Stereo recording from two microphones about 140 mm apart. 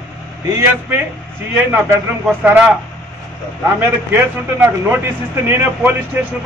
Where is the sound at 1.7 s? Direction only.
15° right (ahead or behind).